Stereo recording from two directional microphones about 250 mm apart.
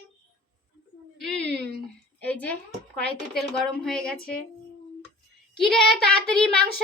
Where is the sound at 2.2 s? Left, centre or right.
Centre.